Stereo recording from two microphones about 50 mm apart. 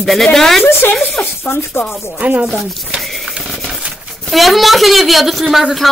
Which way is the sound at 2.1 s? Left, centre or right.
Right.